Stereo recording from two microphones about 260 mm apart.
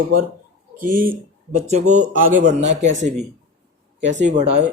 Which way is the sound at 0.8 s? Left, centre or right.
Right.